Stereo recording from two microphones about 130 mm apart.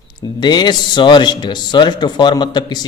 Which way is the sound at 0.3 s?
35° left (ahead or behind).